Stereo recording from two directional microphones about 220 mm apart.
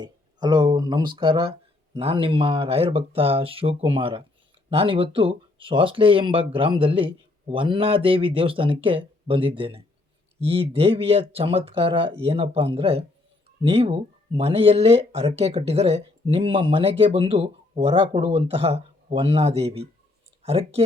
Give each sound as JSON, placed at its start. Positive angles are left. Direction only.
{"t": 0.0, "sound": "speech", "side_deg": -20}